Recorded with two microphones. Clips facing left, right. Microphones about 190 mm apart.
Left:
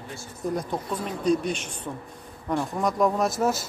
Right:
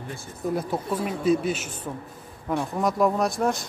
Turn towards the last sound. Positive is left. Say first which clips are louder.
# even
turn(degrees=5)  # may be behind; listen again after turning